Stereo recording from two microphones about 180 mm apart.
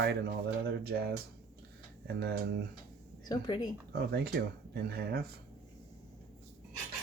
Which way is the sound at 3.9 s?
65° right (ahead or behind).